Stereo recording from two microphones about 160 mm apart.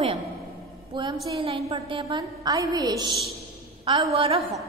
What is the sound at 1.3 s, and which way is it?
A woman's voice, 35° right (ahead or behind).